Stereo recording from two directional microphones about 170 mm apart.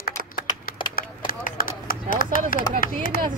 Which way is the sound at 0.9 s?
60° left (ahead or behind).